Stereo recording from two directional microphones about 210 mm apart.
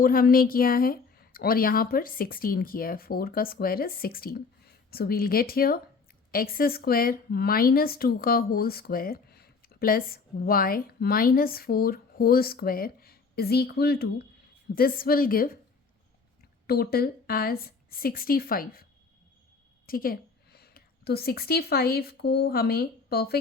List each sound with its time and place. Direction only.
0.0 s speech: 45° left (ahead or behind)
16.6 s speech: 45° left (ahead or behind)
19.9 s a woman's voice: 45° left (ahead or behind)